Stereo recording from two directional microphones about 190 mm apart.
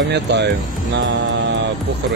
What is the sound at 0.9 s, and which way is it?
Hum, 70° right (ahead or behind).